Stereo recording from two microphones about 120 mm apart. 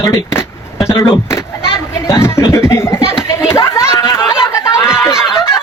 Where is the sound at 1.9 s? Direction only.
20° left (ahead or behind).